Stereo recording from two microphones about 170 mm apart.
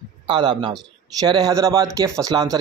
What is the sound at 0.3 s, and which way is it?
Speech, 30° right (ahead or behind).